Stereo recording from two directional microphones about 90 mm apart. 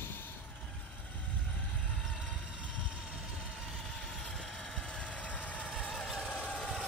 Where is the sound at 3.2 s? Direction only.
5° left (ahead or behind).